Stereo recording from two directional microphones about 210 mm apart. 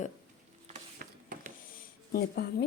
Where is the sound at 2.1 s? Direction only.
45° left (ahead or behind).